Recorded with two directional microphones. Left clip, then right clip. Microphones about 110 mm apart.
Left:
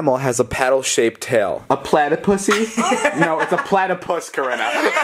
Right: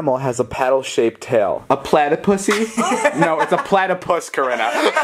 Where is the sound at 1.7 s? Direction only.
Centre (ahead or behind).